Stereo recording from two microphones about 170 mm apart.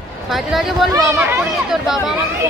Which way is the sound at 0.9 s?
15° right (ahead or behind).